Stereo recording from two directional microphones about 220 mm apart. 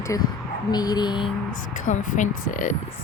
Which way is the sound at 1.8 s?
35° left (ahead or behind).